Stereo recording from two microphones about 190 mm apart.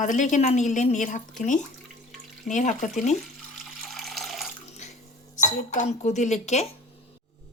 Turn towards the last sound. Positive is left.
turn(degrees=35)  # may be behind; listen again after turning